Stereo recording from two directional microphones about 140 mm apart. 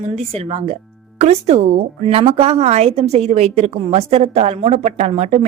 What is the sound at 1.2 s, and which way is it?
A woman's voice, 50° right (ahead or behind).